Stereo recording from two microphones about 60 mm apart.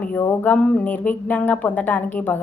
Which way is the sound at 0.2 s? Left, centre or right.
Left.